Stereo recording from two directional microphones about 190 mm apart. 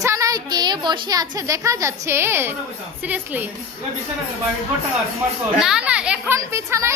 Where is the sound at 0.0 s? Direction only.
15° right (ahead or behind).